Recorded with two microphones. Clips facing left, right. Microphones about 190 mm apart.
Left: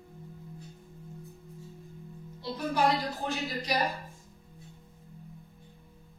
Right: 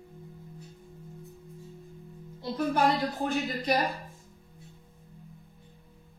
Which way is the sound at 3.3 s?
55° right (ahead or behind).